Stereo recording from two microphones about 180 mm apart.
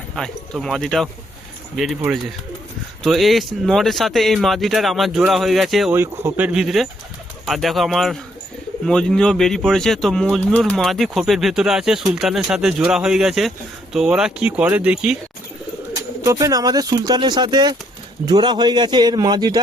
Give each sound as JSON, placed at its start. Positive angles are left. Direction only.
{"t": 0.2, "sound": "speech", "side_deg": 0}
{"t": 5.9, "sound": "speech", "side_deg": -15}
{"t": 16.2, "sound": "speech", "side_deg": -20}